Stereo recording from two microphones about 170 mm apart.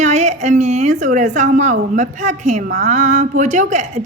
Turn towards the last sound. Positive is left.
turn(degrees=-45)  # may be behind; listen again after turning